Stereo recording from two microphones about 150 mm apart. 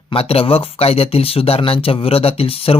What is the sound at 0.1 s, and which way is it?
Speech, 40° left (ahead or behind).